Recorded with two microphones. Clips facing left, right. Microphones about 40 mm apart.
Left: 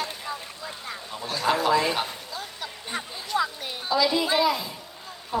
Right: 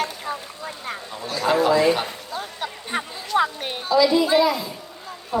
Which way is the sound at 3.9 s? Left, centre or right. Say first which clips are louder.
Right 6 dB; centre.